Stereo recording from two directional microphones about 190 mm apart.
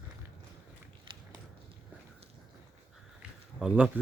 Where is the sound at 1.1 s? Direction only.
25° right (ahead or behind).